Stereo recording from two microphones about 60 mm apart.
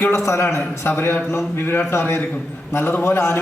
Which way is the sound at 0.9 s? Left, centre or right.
Left.